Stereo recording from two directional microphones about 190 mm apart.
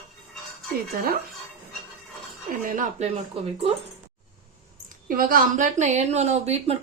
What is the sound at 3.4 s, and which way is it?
Speech, 30° right (ahead or behind).